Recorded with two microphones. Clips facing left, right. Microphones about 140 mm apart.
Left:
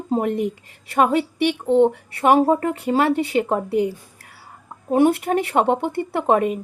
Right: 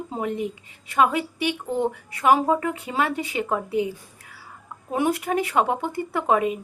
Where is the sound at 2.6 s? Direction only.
45° left (ahead or behind).